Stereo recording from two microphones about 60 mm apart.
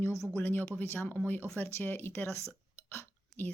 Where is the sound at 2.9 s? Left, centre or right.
Left.